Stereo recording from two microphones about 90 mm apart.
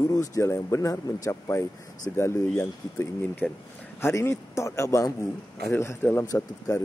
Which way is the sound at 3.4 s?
20° left (ahead or behind).